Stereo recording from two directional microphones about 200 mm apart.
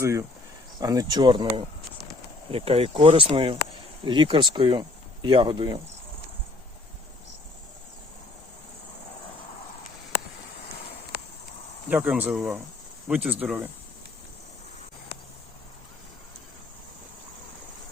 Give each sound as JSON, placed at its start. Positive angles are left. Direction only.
{"t": 0.0, "sound": "speech", "side_deg": -15}
{"t": 11.9, "sound": "speech", "side_deg": -10}